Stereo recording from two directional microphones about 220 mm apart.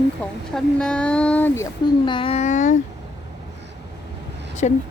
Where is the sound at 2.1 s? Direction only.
25° left (ahead or behind).